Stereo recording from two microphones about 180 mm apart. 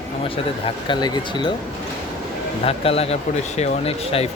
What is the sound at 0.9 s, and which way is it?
Speech, 25° left (ahead or behind).